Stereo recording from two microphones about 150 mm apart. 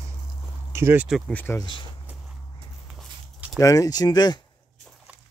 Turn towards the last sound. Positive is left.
turn(degrees=25)  # may be behind; listen again after turning